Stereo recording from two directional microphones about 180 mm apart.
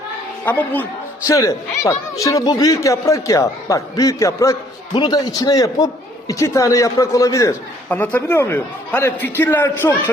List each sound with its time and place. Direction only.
0.4 s a man's voice: 10° left (ahead or behind)